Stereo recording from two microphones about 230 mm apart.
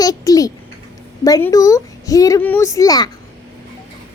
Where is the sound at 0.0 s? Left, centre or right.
Centre.